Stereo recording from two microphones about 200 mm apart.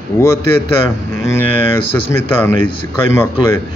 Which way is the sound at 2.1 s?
10° left (ahead or behind).